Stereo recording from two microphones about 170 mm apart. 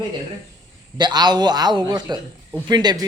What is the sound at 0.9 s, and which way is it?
A man's voice, 25° right (ahead or behind).